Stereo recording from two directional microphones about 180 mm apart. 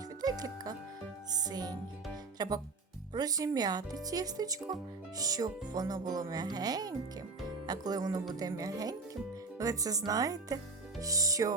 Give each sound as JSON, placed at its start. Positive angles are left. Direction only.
{"t": 0.2, "sound": "music", "side_deg": -20}
{"t": 2.4, "sound": "speech", "side_deg": -20}